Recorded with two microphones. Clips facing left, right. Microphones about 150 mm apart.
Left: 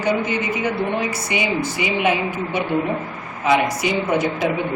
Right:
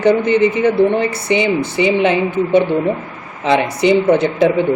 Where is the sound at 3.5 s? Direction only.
65° right (ahead or behind).